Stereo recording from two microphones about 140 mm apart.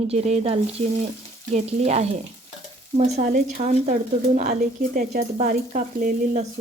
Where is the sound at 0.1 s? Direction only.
50° right (ahead or behind).